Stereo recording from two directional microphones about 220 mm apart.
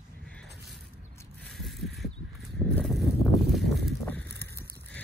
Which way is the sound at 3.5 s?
Centre (ahead or behind).